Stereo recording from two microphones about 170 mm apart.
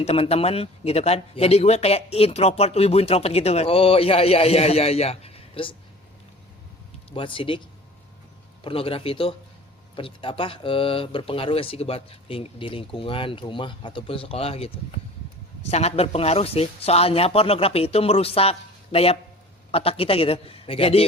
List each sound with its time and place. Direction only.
0.0 s speech: 35° left (ahead or behind)
7.1 s speech: 30° left (ahead or behind)
8.6 s speech: 35° left (ahead or behind)